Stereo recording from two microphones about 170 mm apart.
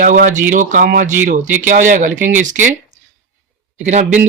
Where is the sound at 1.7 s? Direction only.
50° right (ahead or behind).